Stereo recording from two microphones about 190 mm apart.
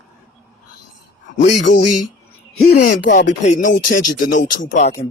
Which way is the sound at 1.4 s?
40° left (ahead or behind).